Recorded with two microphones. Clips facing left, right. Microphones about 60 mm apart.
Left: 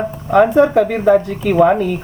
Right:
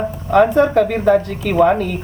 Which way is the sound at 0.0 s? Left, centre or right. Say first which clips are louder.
Left 1 dB; centre.